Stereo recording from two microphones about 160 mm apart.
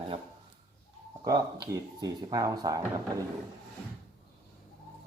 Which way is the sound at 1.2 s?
25° right (ahead or behind).